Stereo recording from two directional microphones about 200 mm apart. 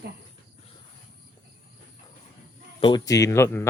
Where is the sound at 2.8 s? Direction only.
20° left (ahead or behind).